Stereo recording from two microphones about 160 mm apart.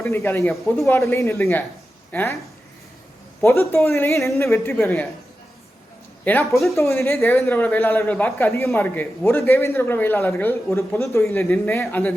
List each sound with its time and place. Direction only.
0.0 s a man's voice: 15° left (ahead or behind)
3.4 s a man's voice: 15° left (ahead or behind)
6.2 s a man's voice: 15° left (ahead or behind)